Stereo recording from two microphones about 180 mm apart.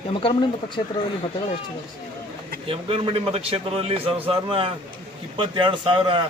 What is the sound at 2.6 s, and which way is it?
A man's voice, 30° right (ahead or behind).